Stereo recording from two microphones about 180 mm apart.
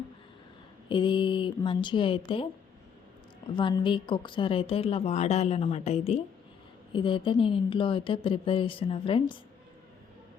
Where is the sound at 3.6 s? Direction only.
25° left (ahead or behind).